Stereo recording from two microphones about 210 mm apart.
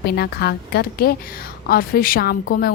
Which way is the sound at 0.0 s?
50° left (ahead or behind).